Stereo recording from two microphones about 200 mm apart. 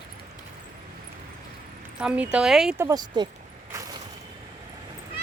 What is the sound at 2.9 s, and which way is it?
Speech, 20° right (ahead or behind).